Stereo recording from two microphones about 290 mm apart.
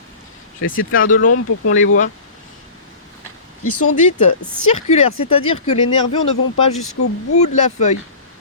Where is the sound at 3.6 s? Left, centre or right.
Left.